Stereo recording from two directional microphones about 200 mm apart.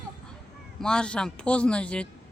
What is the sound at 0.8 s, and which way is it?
A man's voice, 5° left (ahead or behind).